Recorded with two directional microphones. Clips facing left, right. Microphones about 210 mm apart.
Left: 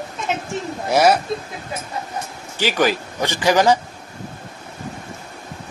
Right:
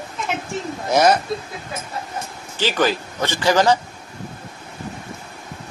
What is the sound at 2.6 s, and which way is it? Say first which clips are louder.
A man's voice: left 1 dB; 15° left (ahead or behind).